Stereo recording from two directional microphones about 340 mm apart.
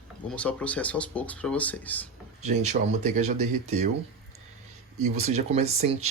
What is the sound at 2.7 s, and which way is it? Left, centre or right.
Speech, centre.